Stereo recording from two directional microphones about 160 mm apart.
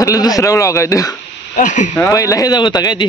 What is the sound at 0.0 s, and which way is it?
Speech, 20° left (ahead or behind).